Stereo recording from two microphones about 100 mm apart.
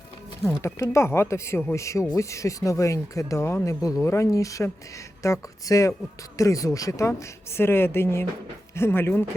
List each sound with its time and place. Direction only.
0.6 s a woman's voice: 30° left (ahead or behind)